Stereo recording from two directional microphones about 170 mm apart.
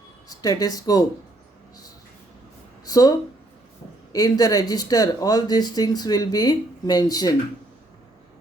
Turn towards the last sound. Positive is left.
turn(degrees=20)  # may be behind; listen again after turning